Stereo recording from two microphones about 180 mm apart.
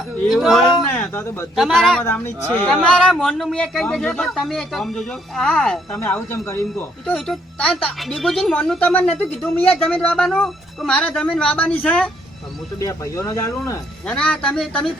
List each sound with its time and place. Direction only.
0.3 s a man's voice: centre (ahead or behind)
0.9 s a sound: 10° left (ahead or behind)
1.5 s a man's voice: centre (ahead or behind)
5.9 s a man's voice: 15° left (ahead or behind)